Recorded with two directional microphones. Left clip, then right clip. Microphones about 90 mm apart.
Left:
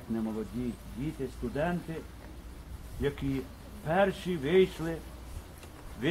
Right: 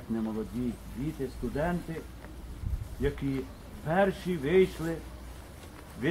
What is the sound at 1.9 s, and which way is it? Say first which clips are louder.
Speech: right 1 dB; 30° left (ahead or behind).